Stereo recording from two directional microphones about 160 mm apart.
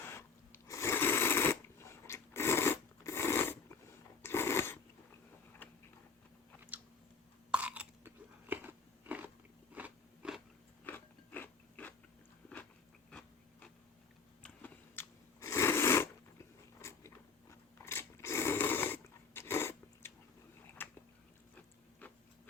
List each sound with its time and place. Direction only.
0.0 s sewing machine: 15° left (ahead or behind)
4.2 s a sound: 15° left (ahead or behind)
5.6 s tick-tock: 10° left (ahead or behind)
7.5 s chewing: 10° right (ahead or behind)
9.7 s biting: 5° right (ahead or behind)
10.8 s biting: 10° left (ahead or behind)
13.1 s a sound: 5° left (ahead or behind)
14.4 s biting: 15° left (ahead or behind)
17.5 s a sound: 15° left (ahead or behind)
20.8 s biting: 10° left (ahead or behind)